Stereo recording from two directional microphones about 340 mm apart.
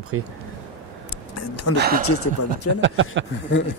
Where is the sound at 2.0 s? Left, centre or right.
Left.